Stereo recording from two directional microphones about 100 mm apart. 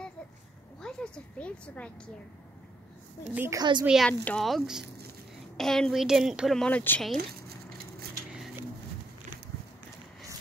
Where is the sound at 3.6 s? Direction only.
45° right (ahead or behind).